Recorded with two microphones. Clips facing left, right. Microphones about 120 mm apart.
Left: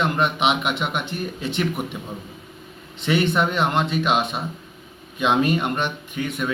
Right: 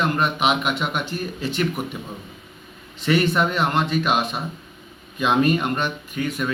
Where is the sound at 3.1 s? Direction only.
20° left (ahead or behind).